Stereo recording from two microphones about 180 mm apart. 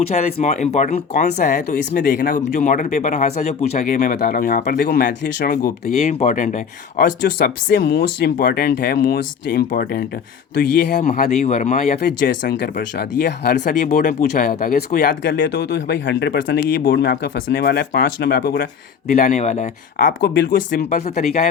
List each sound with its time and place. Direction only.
0.1 s speech: 40° left (ahead or behind)
7.4 s speech: 60° left (ahead or behind)
11.0 s speech: 40° left (ahead or behind)
11.9 s speech: 60° left (ahead or behind)
15.4 s speech: 70° left (ahead or behind)
19.0 s speech: 45° left (ahead or behind)